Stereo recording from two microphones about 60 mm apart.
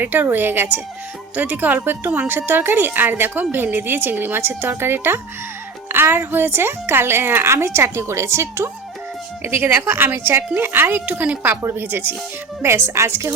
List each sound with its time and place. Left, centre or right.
0.0 s a woman's voice: right
11.0 s a woman's voice: right
11.4 s a woman's voice: right
12.6 s speech: right